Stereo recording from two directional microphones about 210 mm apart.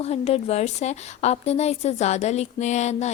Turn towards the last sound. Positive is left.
turn(degrees=35)  # may be behind; listen again after turning